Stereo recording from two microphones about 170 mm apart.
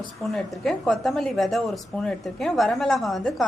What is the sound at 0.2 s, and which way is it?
A woman's voice, centre (ahead or behind).